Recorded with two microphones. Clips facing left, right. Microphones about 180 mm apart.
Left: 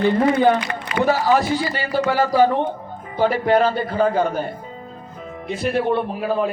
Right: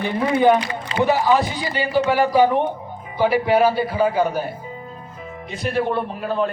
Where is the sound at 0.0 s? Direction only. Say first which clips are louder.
Left 2 dB; 15° right (ahead or behind).